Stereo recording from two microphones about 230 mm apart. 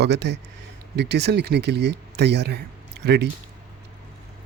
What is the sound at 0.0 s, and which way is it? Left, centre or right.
Speech, right.